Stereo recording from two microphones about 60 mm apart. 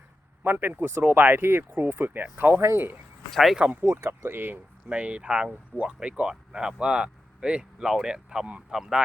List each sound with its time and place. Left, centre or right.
0.4 s speech: right
2.6 s speech: right
3.3 s speech: centre
3.8 s speech: right
4.9 s speech: right